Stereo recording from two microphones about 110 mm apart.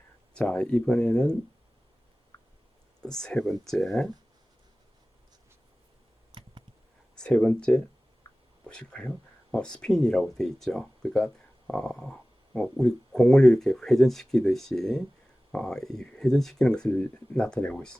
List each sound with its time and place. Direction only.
0.3 s speech: 10° left (ahead or behind)
2.3 s a sound: 25° left (ahead or behind)
3.0 s speech: 5° left (ahead or behind)
7.2 s speech: 10° left (ahead or behind)